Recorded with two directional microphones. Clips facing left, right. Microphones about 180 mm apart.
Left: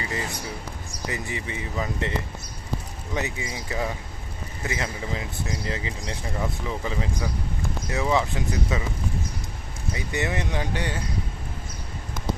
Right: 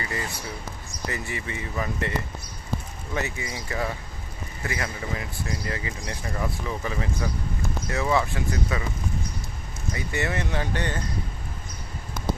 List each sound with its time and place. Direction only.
0.0 s speech: 20° left (ahead or behind)
3.2 s speech: 20° left (ahead or behind)
9.9 s speech: 20° left (ahead or behind)